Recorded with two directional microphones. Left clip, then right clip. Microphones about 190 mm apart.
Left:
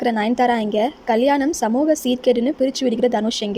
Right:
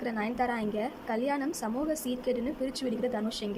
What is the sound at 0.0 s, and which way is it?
A woman's voice, 40° left (ahead or behind).